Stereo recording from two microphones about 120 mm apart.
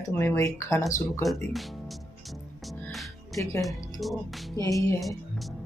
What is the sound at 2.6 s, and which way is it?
Music, centre (ahead or behind).